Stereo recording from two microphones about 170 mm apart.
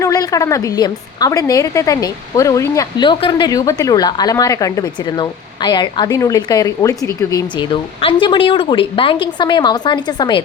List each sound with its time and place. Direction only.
0.0 s a woman's voice: 20° left (ahead or behind)